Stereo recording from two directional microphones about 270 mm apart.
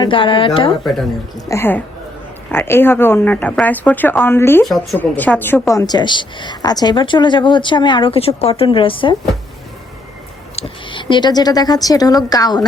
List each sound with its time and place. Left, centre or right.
0.0 s speech: centre
1.5 s speech: centre
10.5 s speech: centre